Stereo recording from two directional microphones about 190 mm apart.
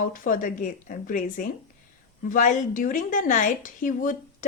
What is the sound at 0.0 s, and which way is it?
A woman's voice, 45° left (ahead or behind).